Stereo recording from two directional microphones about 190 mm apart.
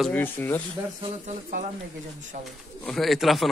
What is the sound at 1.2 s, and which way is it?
Speech, 45° right (ahead or behind).